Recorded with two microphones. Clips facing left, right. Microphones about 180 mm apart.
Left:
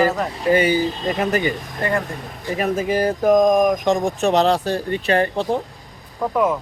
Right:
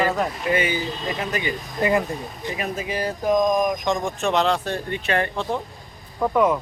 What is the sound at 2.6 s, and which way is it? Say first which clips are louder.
Speech: left 8 dB; 45° left (ahead or behind).